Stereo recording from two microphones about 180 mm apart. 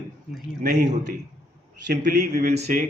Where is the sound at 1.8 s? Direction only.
60° right (ahead or behind).